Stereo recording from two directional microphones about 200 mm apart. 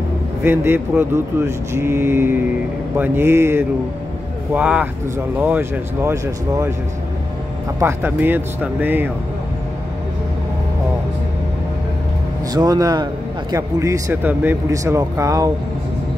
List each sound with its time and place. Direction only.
0.4 s a man's voice: 10° right (ahead or behind)
7.8 s a man's voice: 10° right (ahead or behind)
12.5 s a man's voice: 20° right (ahead or behind)